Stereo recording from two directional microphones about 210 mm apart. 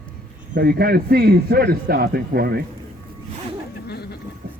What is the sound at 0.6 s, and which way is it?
Speech, 45° right (ahead or behind).